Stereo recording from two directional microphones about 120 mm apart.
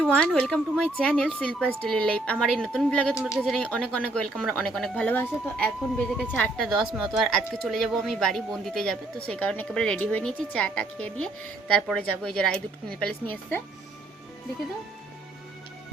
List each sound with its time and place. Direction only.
0.0 s speech: 10° left (ahead or behind)
3.2 s speech: 25° left (ahead or behind)
3.4 s speech: 5° left (ahead or behind)